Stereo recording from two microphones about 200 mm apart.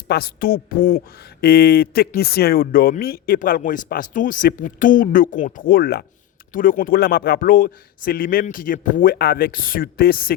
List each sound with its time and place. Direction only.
0.1 s speech: 50° left (ahead or behind)